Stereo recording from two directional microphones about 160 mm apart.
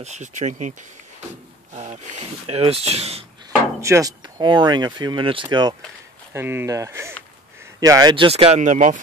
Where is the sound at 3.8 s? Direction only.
20° right (ahead or behind).